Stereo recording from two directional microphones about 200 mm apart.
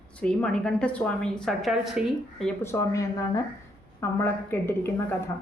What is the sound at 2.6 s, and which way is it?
Speech, 15° left (ahead or behind).